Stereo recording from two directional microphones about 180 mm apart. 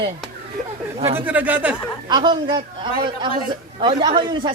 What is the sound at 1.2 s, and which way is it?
Speech, 10° right (ahead or behind).